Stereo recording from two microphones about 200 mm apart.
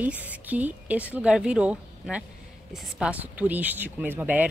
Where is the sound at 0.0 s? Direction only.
10° right (ahead or behind).